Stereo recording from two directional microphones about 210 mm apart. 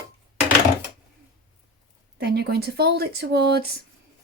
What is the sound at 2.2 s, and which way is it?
Speech, 50° right (ahead or behind).